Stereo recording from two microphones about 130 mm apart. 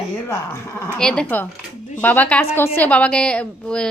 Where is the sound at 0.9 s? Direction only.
5° left (ahead or behind).